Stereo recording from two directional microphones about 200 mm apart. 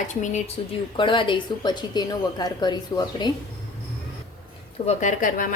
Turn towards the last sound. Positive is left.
turn(degrees=40)  # may be behind; listen again after turning